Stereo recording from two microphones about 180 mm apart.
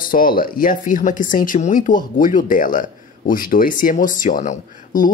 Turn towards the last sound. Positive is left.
turn(degrees=50)  # may be behind; listen again after turning